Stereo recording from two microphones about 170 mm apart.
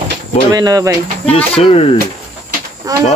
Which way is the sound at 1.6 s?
35° left (ahead or behind).